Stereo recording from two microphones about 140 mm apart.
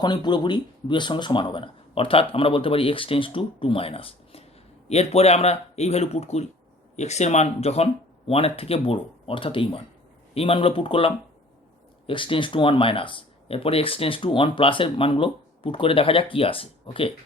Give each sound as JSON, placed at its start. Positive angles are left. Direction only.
{"t": 0.0, "sound": "speech", "side_deg": 30}